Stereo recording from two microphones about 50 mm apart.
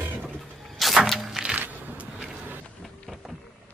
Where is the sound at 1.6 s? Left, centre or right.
Right.